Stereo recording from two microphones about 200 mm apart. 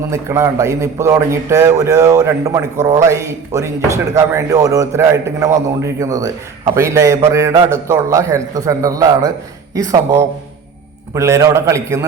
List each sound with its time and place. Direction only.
0.1 s speech: 15° right (ahead or behind)